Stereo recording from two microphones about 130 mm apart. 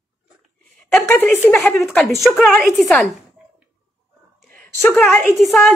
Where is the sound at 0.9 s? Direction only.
10° left (ahead or behind).